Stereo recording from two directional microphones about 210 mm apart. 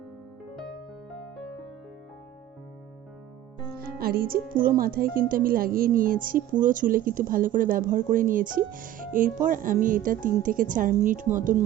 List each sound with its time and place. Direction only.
3.8 s speech: 45° right (ahead or behind)